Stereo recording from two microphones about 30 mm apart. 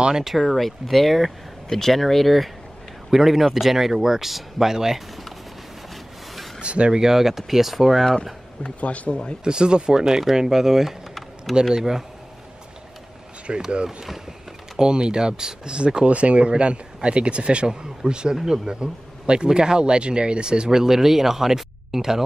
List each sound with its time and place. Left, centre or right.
0.1 s speech: centre
0.4 s speech: centre
3.1 s a man's voice: centre
6.6 s speech: right
6.9 s speech: centre
8.8 s speech: left
9.4 s speech: right
9.9 s speech: centre
13.5 s speech: right
14.8 s speech: right
16.1 s speech: right
17.6 s speech: right
20.7 s speech: centre